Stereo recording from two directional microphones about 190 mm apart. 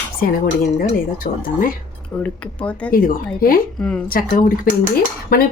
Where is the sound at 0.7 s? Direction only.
45° left (ahead or behind).